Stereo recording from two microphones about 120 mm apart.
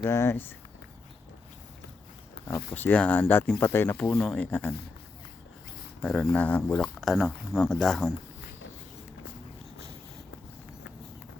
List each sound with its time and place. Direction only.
0.0 s speech: 25° left (ahead or behind)
2.5 s speech: 15° left (ahead or behind)
6.0 s speech: centre (ahead or behind)
6.3 s speech: 10° left (ahead or behind)